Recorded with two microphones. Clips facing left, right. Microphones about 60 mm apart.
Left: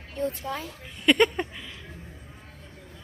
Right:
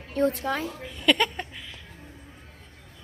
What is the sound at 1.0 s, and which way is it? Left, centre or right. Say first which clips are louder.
Speech: left 3 dB; centre.